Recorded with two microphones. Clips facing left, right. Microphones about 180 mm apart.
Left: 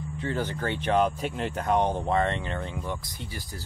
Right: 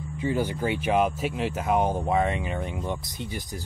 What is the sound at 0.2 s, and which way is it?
Speech, 10° right (ahead or behind).